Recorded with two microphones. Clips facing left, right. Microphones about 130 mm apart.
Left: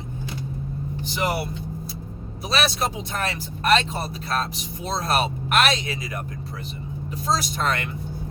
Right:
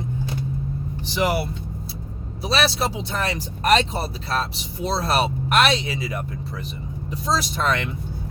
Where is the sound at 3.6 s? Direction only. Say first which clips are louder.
Right 2 dB; 35° right (ahead or behind).